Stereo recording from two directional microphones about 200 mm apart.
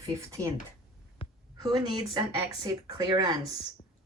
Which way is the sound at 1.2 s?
25° left (ahead or behind).